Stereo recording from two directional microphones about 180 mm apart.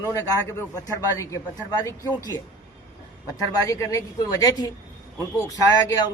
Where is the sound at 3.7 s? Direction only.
20° left (ahead or behind).